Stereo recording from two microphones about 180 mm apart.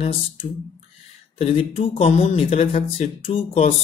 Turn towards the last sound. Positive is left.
turn(degrees=35)  # may be behind; listen again after turning